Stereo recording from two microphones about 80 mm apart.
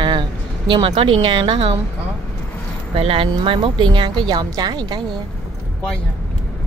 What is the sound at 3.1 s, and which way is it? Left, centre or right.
Speech, right.